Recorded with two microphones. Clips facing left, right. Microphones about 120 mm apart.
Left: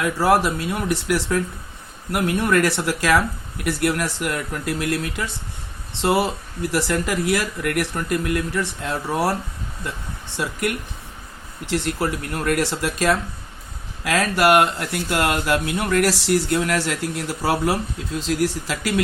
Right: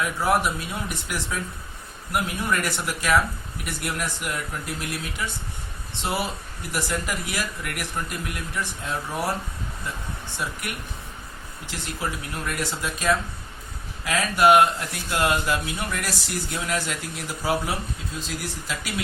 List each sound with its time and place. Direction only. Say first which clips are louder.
0.0 s speech: left 5 dB; 80° left
10.3 s speech: left 9 dB; 70° left (ahead or behind)